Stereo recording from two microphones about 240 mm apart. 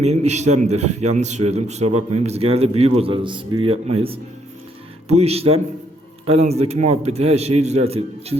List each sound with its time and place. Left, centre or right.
0.0 s a man's voice: right